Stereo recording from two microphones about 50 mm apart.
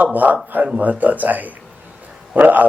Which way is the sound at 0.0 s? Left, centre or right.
Right.